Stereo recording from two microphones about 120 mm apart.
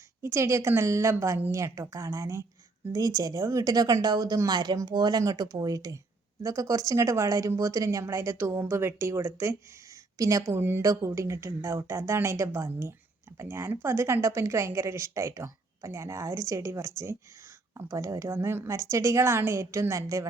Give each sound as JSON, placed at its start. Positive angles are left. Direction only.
{"t": 0.2, "sound": "a woman's voice", "side_deg": -25}